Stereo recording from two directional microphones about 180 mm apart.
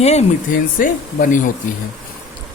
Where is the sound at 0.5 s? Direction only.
50° left (ahead or behind).